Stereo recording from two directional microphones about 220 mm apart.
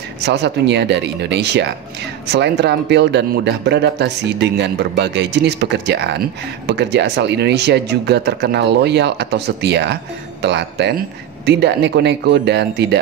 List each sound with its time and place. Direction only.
0.2 s a man's voice: 50° right (ahead or behind)